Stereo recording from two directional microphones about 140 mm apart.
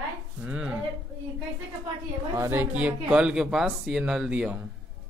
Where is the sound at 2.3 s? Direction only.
20° right (ahead or behind).